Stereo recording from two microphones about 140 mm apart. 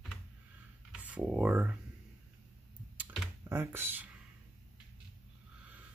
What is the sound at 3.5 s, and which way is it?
Speech, 15° right (ahead or behind).